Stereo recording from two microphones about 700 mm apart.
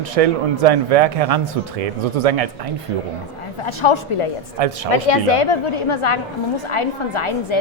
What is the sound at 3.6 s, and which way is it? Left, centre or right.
A woman's voice, left.